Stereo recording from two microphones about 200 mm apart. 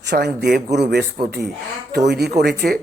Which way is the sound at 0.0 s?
60° right (ahead or behind).